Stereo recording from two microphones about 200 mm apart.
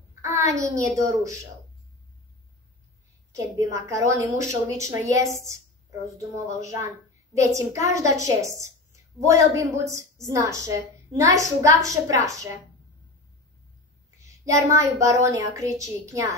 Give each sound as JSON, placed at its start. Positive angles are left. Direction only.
{"t": 0.1, "sound": "a woman's voice", "side_deg": -15}
{"t": 3.3, "sound": "a woman's voice", "side_deg": -15}
{"t": 14.2, "sound": "a woman's voice", "side_deg": -15}